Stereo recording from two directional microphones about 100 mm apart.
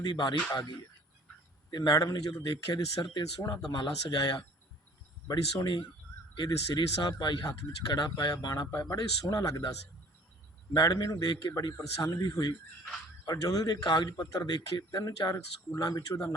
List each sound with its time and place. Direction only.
0.0 s speech: 50° left (ahead or behind)
1.7 s speech: 40° left (ahead or behind)
10.8 s speech: 40° left (ahead or behind)